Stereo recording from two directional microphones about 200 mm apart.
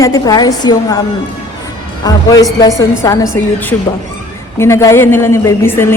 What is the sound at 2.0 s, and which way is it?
A woman's voice, 20° left (ahead or behind).